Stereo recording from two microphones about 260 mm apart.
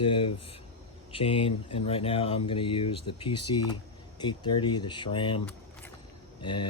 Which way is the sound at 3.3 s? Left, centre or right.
Left.